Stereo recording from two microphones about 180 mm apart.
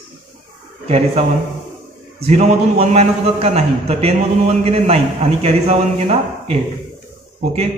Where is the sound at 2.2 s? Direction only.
35° right (ahead or behind).